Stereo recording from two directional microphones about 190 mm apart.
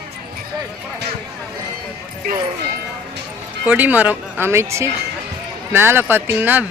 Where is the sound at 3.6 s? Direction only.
10° right (ahead or behind).